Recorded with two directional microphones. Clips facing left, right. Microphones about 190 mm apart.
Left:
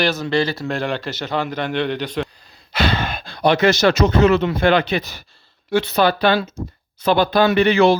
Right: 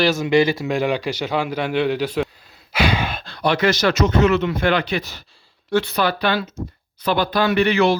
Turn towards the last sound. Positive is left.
turn(degrees=25)  # may be behind; listen again after turning